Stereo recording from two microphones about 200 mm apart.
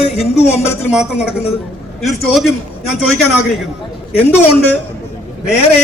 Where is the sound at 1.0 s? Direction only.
5° right (ahead or behind).